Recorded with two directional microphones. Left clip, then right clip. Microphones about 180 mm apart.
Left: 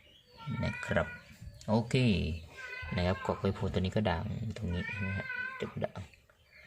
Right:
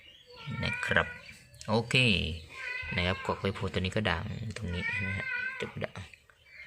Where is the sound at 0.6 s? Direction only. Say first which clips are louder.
Right 5 dB; 15° left (ahead or behind).